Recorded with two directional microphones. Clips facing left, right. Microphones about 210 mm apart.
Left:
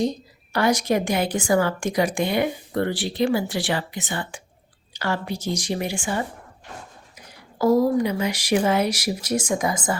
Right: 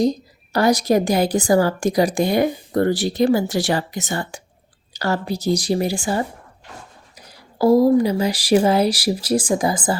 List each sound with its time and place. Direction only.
0.5 s speech: 35° right (ahead or behind)
7.6 s speech: 35° right (ahead or behind)